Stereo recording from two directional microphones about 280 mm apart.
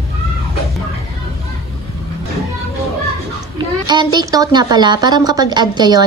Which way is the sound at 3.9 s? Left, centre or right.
Centre.